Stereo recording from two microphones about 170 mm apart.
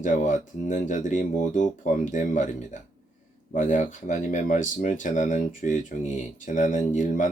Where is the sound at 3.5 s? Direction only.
50° left (ahead or behind).